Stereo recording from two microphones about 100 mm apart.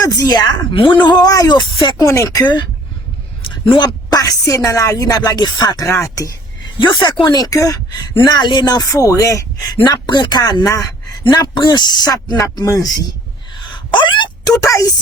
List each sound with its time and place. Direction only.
0.0 s speech: 40° left (ahead or behind)
1.0 s speech: 40° left (ahead or behind)
2.0 s speech: 30° left (ahead or behind)
3.7 s speech: 45° left (ahead or behind)
5.9 s speech: 30° left (ahead or behind)
6.7 s speech: 55° left (ahead or behind)
7.3 s speech: 40° left (ahead or behind)
9.8 s speech: 45° left (ahead or behind)
11.1 s a sound: 45° left (ahead or behind)
11.5 s speech: 50° left (ahead or behind)
13.9 s a sound: 50° left (ahead or behind)
14.6 s speech: 35° left (ahead or behind)